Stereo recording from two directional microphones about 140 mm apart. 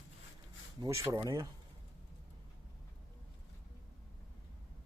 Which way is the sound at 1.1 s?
25° right (ahead or behind).